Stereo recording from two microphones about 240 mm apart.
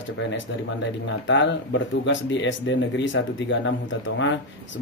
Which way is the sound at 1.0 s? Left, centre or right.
Left.